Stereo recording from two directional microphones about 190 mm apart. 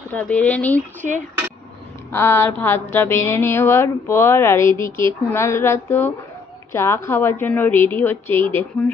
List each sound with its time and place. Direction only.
0.1 s speech: 10° left (ahead or behind)
2.1 s speech: 15° left (ahead or behind)